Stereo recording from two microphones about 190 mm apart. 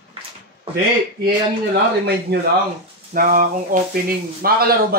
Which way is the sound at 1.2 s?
55° right (ahead or behind).